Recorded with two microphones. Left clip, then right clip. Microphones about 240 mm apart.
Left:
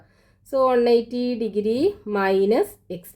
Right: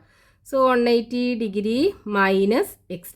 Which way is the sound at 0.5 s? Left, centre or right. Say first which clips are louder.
Even; right.